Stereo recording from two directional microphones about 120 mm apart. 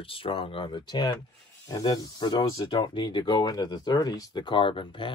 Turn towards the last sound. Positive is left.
turn(degrees=45)  # may be behind; listen again after turning